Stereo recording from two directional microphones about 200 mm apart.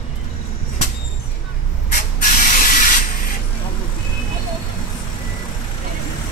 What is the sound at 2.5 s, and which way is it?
Spray, 45° left (ahead or behind).